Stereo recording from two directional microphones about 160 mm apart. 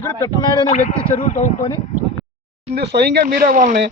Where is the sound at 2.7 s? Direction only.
90° right; by 3.8 s 50° right (ahead or behind).